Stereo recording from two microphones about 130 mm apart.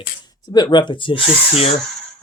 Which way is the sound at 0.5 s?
35° left (ahead or behind).